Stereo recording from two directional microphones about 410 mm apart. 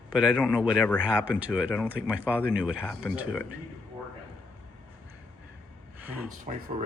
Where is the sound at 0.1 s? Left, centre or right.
Centre.